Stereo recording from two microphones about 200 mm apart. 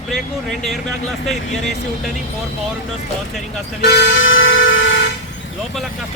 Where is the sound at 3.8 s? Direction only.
55° left (ahead or behind); by 5.0 s 70° left (ahead or behind).